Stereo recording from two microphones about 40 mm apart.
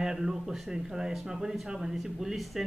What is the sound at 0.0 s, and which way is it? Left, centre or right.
A man's voice, centre.